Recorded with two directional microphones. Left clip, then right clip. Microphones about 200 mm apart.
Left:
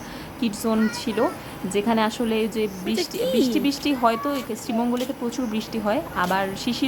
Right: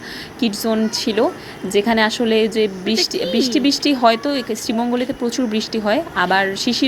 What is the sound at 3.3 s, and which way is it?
Speech, 10° left (ahead or behind).